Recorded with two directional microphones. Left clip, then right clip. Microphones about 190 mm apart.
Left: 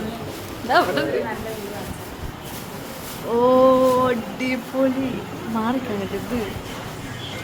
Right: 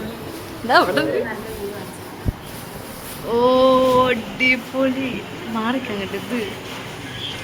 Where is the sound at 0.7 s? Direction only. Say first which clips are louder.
Right 3 dB; 10° right (ahead or behind).